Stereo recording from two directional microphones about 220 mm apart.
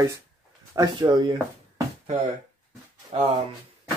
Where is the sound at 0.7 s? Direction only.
20° right (ahead or behind).